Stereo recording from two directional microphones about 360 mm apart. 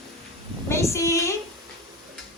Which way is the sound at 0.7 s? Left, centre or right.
Centre.